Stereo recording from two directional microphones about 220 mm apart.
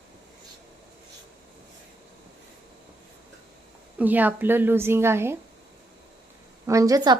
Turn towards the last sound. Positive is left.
turn(degrees=-15)  # may be behind; listen again after turning